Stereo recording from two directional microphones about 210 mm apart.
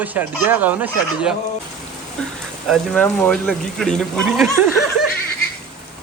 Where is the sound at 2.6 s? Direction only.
Centre (ahead or behind).